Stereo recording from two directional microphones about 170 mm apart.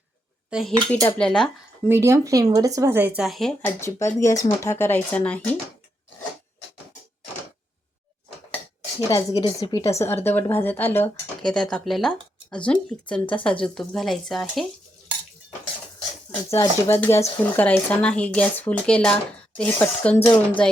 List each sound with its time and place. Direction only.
0.5 s speech: centre (ahead or behind)
1.9 s speech: 15° right (ahead or behind); by 3.5 s centre (ahead or behind)
3.6 s speech: 15° left (ahead or behind)
9.0 s a woman's voice: 20° left (ahead or behind); by 14.7 s centre (ahead or behind)
16.3 s speech: 15° left (ahead or behind)